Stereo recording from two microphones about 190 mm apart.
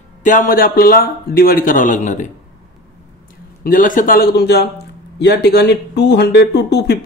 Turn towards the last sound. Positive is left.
turn(degrees=60)  # may be behind; listen again after turning